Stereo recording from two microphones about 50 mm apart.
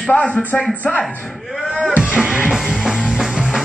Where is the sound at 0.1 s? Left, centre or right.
Left.